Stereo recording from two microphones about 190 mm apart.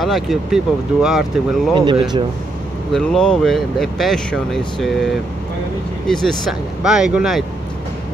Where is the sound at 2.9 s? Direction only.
5° left (ahead or behind).